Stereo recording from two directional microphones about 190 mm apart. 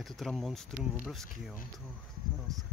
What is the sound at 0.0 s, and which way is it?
Speech, centre (ahead or behind).